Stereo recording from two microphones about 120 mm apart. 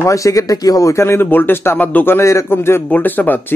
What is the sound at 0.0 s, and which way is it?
Speech, 25° left (ahead or behind).